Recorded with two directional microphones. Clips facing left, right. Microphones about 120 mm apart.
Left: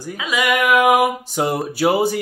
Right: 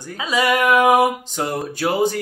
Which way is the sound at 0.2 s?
35° right (ahead or behind).